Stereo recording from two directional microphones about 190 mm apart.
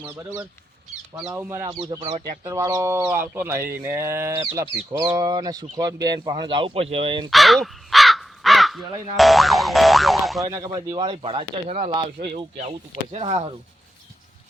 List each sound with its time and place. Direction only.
1.3 s speech: 15° right (ahead or behind)
2.0 s speech: 30° right (ahead or behind)
2.4 s speech: 15° right (ahead or behind)
7.3 s speech: centre (ahead or behind)
10.4 s speech: 15° right (ahead or behind); by 13.5 s 35° right (ahead or behind)